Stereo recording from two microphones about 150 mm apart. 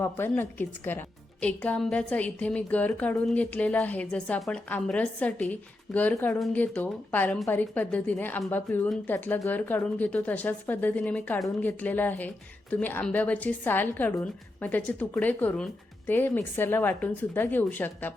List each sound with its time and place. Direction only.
0.0 s a woman's voice: 15° left (ahead or behind)